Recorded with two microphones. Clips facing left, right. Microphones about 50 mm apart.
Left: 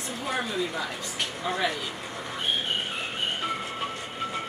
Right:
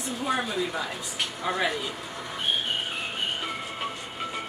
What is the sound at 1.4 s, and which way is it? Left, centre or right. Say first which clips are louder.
Speech: right 1 dB; centre.